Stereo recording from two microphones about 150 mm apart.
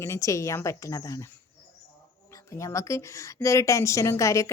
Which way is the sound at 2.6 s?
20° left (ahead or behind).